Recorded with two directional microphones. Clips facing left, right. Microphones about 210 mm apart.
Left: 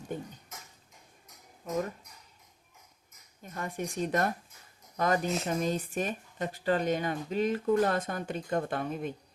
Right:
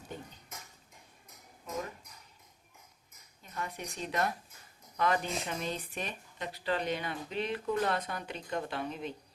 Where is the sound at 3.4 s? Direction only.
50° left (ahead or behind).